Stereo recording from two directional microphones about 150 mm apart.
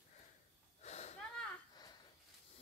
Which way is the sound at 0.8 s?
45° left (ahead or behind).